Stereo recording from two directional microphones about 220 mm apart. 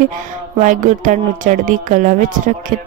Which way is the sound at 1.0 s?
35° right (ahead or behind).